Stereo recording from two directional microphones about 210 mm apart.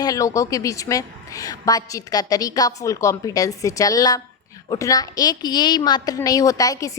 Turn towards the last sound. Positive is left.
turn(degrees=15)  # may be behind; listen again after turning